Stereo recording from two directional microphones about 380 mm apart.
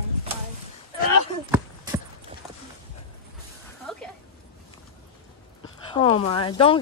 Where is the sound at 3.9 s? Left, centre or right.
Centre.